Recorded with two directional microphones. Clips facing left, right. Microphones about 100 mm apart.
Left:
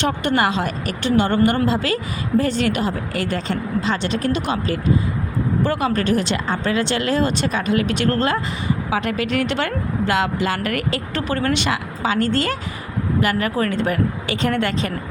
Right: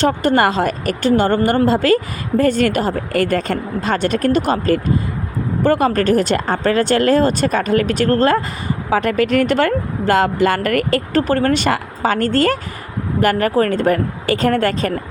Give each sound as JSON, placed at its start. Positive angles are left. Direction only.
{"t": 0.0, "sound": "a woman's voice", "side_deg": -40}